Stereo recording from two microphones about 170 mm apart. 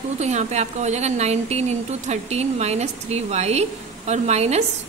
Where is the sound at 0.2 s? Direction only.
40° right (ahead or behind).